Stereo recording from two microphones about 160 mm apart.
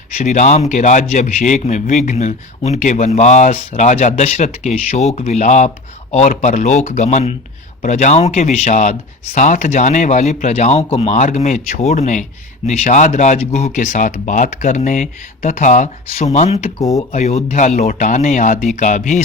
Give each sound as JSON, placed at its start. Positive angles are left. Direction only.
{"t": 0.2, "sound": "speech", "side_deg": 45}